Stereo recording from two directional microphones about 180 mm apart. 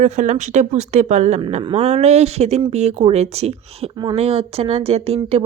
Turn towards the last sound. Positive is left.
turn(degrees=-35)  # may be behind; listen again after turning